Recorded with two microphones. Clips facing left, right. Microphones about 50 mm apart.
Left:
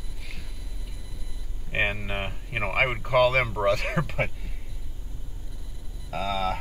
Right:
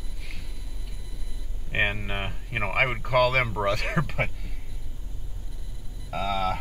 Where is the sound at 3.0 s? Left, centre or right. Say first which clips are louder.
Left 2 dB; right.